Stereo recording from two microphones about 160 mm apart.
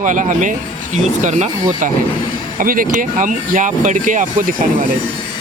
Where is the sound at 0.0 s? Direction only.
55° right (ahead or behind).